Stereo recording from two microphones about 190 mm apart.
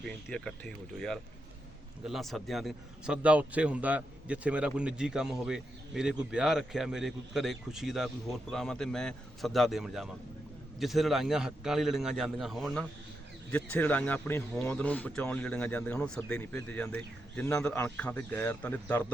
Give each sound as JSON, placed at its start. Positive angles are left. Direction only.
{"t": 0.0, "sound": "a man's voice", "side_deg": 5}